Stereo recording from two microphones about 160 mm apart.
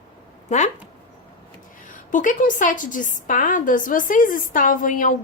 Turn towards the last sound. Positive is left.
turn(degrees=55)  # may be behind; listen again after turning